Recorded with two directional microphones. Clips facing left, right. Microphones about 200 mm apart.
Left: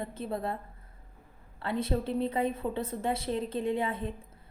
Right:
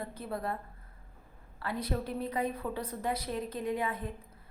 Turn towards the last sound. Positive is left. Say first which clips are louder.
# left 3 dB
turn(degrees=25)  # may be behind; listen again after turning